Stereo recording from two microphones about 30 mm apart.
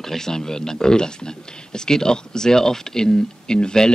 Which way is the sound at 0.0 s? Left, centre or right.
Centre.